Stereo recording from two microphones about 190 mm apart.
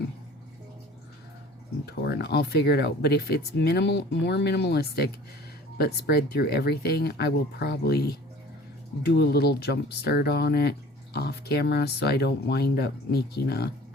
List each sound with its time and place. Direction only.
1.9 s speech: 60° left (ahead or behind)